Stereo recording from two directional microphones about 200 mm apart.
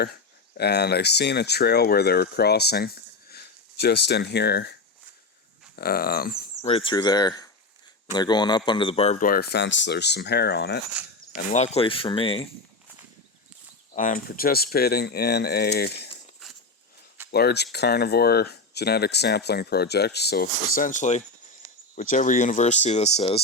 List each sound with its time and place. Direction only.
0.0 s speech: 55° left (ahead or behind)
5.7 s speech: 50° left (ahead or behind)
6.6 s a man's voice: 25° left (ahead or behind)
9.2 s speech: 50° left (ahead or behind)
11.5 s a man's voice: 35° left (ahead or behind)
13.9 s speech: 40° left (ahead or behind)
17.3 s speech: 55° left (ahead or behind); by 23.4 s 30° left (ahead or behind)